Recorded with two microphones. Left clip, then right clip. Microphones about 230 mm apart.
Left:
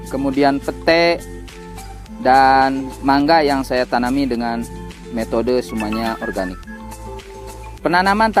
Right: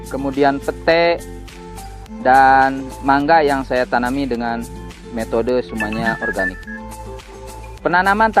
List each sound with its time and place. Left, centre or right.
0.1 s speech: left
2.2 s speech: left
7.8 s speech: left